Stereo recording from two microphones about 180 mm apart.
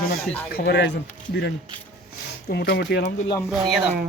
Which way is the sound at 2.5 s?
65° left (ahead or behind).